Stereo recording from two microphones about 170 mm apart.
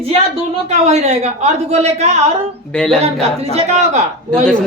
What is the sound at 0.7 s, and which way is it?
Speech, 40° right (ahead or behind).